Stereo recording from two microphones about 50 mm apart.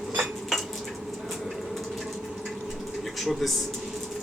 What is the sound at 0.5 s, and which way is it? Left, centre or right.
Dishes, centre.